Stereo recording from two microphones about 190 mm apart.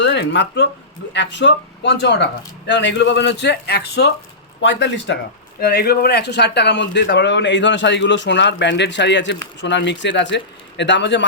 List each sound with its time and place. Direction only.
0.0 s speech: 65° left (ahead or behind)
4.6 s a man's voice: 70° left (ahead or behind)
5.5 s a man's voice: 55° left (ahead or behind)